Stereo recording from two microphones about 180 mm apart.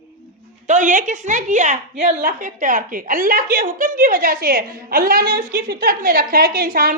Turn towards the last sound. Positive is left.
turn(degrees=-55)  # may be behind; listen again after turning